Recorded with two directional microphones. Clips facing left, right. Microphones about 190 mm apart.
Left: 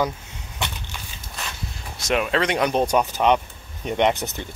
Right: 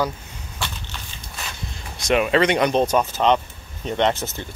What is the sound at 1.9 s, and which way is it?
Speech, centre (ahead or behind).